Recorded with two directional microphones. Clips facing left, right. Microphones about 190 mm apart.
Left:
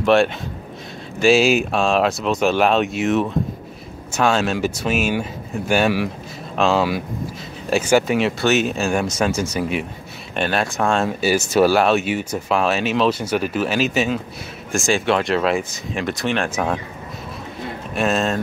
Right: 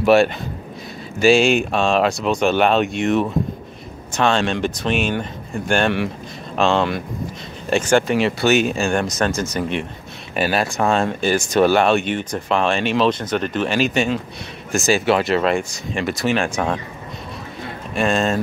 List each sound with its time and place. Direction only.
0.0 s speech: 5° right (ahead or behind)
17.9 s speech: centre (ahead or behind)